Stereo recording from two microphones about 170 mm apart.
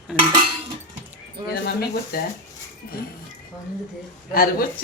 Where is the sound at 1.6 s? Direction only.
70° left (ahead or behind).